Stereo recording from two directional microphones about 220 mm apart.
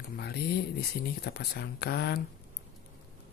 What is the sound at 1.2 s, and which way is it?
Speech, 45° left (ahead or behind).